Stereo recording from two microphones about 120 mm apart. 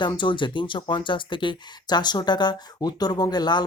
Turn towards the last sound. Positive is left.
turn(degrees=35)  # may be behind; listen again after turning